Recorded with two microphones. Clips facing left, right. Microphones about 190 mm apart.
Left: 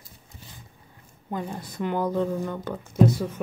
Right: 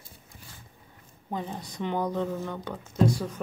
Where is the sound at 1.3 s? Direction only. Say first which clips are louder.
Left 2 dB; centre (ahead or behind).